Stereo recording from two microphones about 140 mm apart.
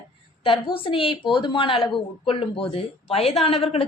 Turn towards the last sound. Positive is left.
turn(degrees=45)  # may be behind; listen again after turning